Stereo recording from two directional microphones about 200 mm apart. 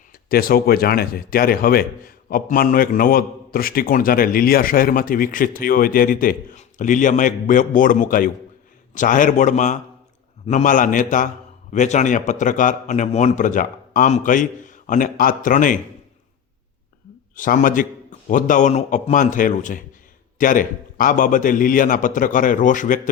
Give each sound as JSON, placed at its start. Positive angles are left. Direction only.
{"t": 0.3, "sound": "a man's voice", "side_deg": 45}
{"t": 17.3, "sound": "a man's voice", "side_deg": 40}